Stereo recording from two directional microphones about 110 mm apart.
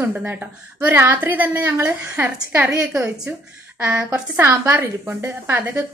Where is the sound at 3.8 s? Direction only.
15° right (ahead or behind).